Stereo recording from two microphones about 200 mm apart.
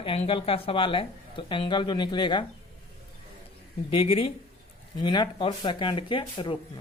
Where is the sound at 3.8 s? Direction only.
25° left (ahead or behind).